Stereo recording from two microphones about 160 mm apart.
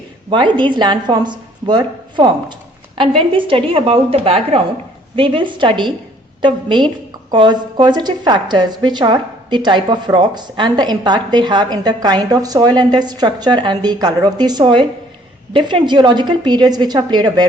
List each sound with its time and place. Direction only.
0.3 s a woman's voice: 30° right (ahead or behind)